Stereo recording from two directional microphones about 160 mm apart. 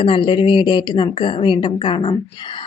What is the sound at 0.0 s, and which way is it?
Speech, 30° left (ahead or behind).